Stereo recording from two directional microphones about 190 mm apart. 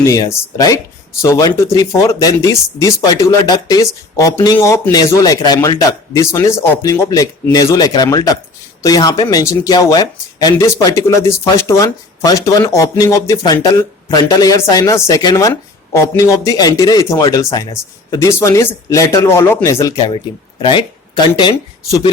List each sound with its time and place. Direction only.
0.0 s speech: 15° left (ahead or behind)